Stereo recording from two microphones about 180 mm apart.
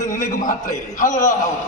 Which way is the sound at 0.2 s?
45° left (ahead or behind).